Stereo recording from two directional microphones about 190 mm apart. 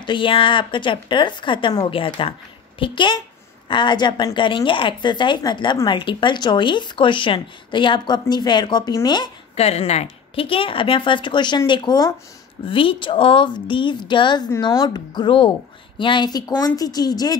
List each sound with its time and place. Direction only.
0.0 s a woman's voice: 25° left (ahead or behind)